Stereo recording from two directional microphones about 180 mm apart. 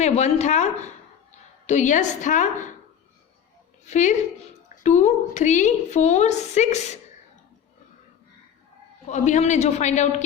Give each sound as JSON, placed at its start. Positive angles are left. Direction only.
{"t": 0.0, "sound": "a woman's voice", "side_deg": 40}
{"t": 3.8, "sound": "a woman's voice", "side_deg": 40}
{"t": 9.0, "sound": "a woman's voice", "side_deg": 40}